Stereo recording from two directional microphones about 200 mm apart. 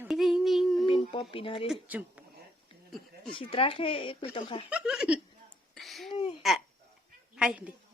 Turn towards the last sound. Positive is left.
turn(degrees=-5)  # may be behind; listen again after turning